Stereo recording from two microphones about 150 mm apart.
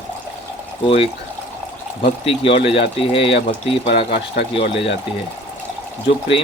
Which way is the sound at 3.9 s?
90° left.